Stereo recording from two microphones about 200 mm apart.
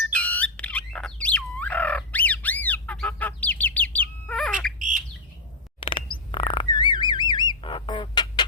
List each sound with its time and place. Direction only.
0.1 s bird: 5° left (ahead or behind)
4.8 s bird: 40° right (ahead or behind)
5.8 s a sound: 25° left (ahead or behind)
6.3 s bird: 25° left (ahead or behind)